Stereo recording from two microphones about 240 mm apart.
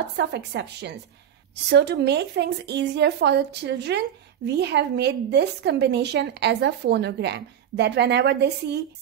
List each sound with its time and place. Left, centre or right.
0.2 s a woman's voice: right